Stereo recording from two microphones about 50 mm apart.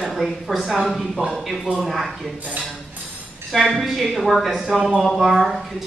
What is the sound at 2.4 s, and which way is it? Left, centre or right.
Speech, right.